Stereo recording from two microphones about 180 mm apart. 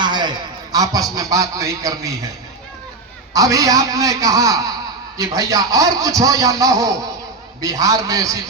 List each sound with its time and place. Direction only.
0.0 s a man's voice: 25° right (ahead or behind)
3.3 s a man's voice: 20° right (ahead or behind)